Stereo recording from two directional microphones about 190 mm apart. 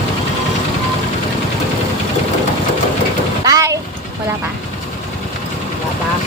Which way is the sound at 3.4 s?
20° right (ahead or behind).